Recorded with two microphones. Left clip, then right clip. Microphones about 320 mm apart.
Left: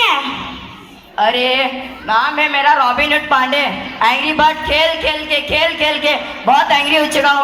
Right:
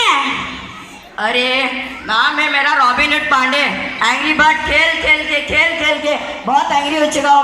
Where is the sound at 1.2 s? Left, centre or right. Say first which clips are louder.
Left 2 dB; left.